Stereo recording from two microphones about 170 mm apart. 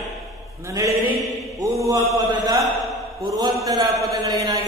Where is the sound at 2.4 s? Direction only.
25° right (ahead or behind).